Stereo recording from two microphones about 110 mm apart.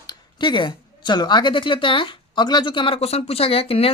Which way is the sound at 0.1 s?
45° left (ahead or behind).